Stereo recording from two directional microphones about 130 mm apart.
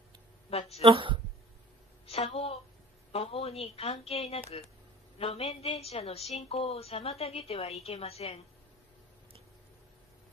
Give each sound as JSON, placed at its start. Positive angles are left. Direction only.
{"t": 0.5, "sound": "a woman's voice", "side_deg": 50}
{"t": 0.7, "sound": "speech", "side_deg": -45}
{"t": 2.0, "sound": "a sound", "side_deg": 50}
{"t": 3.1, "sound": "a woman's voice", "side_deg": 50}